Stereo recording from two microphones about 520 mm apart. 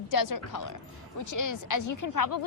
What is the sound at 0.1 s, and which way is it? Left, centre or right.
A woman's voice, left.